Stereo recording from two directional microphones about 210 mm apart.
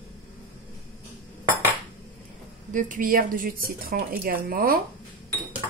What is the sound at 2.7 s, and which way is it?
Speech, 40° right (ahead or behind).